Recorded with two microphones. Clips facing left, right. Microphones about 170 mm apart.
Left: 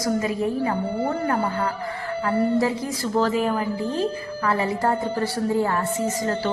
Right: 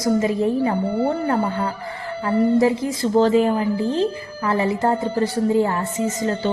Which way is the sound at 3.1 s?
25° right (ahead or behind).